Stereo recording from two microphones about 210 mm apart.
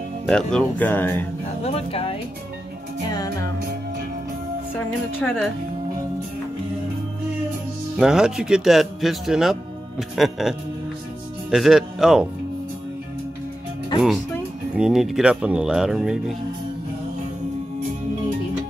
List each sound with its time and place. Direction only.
0.3 s speech: 5° left (ahead or behind)
1.6 s speech: 30° left (ahead or behind)
3.2 s speech: 15° left (ahead or behind)
4.7 s speech: 5° left (ahead or behind)
8.0 s speech: centre (ahead or behind)
11.5 s speech: centre (ahead or behind)
14.8 s speech: centre (ahead or behind)